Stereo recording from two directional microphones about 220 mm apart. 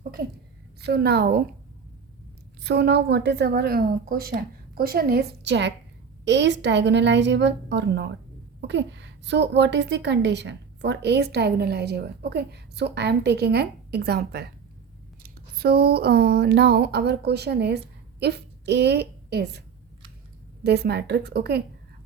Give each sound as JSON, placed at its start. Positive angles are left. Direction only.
{"t": 0.8, "sound": "a woman's voice", "side_deg": -45}
{"t": 2.6, "sound": "a woman's voice", "side_deg": -50}
{"t": 20.7, "sound": "a woman's voice", "side_deg": -50}